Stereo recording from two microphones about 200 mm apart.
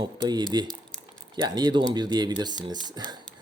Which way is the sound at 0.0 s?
20° right (ahead or behind).